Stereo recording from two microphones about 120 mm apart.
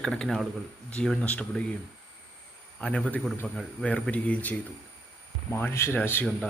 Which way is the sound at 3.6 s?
5° left (ahead or behind).